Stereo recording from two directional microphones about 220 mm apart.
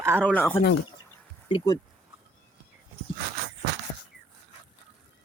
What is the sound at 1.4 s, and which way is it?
Speech, 20° left (ahead or behind).